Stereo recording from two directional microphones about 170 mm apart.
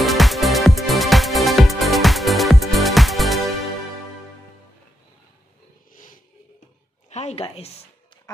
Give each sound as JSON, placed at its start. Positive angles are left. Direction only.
{"t": 0.0, "sound": "music", "side_deg": 0}
{"t": 7.1, "sound": "a woman's voice", "side_deg": 40}